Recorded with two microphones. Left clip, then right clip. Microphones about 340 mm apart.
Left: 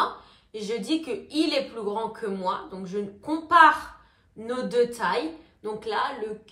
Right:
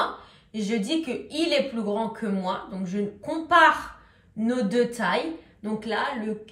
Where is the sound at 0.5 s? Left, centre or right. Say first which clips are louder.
Even; centre.